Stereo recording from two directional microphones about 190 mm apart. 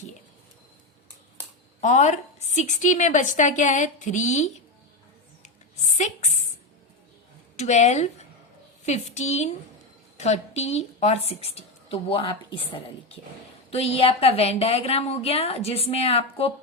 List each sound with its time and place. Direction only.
1.8 s a woman's voice: 40° left (ahead or behind)
5.4 s a sound: 35° left (ahead or behind)
7.5 s a woman's voice: 35° left (ahead or behind)
13.7 s a woman's voice: 30° left (ahead or behind)